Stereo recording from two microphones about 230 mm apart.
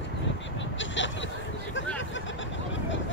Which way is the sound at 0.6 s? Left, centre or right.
Left.